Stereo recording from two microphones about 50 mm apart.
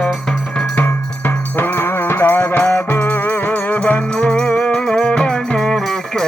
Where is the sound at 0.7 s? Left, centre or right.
Left.